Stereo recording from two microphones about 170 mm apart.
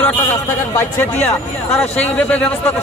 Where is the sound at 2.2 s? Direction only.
10° left (ahead or behind).